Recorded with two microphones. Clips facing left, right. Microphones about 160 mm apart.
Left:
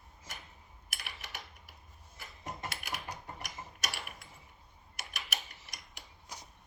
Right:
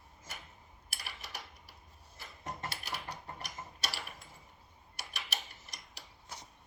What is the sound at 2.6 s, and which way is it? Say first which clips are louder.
Mechanisms: left 2 dB; 35° right (ahead or behind).